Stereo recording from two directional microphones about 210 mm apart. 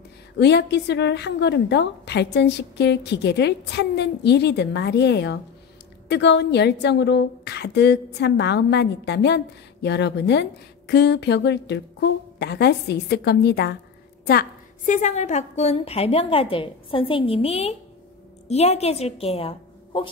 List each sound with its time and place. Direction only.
0.4 s a woman's voice: 55° left (ahead or behind)
14.9 s a woman's voice: 35° left (ahead or behind)